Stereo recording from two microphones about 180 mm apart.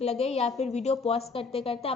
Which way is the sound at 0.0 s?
35° left (ahead or behind).